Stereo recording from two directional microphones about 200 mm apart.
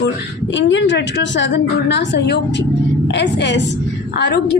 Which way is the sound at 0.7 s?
65° left (ahead or behind).